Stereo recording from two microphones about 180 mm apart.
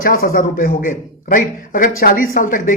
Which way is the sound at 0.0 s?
50° left (ahead or behind).